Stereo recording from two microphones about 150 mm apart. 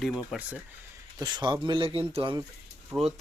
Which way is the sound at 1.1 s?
25° right (ahead or behind).